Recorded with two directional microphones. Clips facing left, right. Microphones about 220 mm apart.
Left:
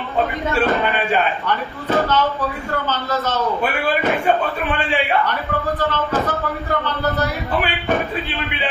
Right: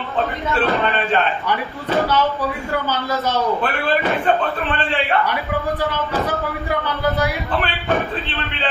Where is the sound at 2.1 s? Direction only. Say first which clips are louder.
Even; 10° right (ahead or behind).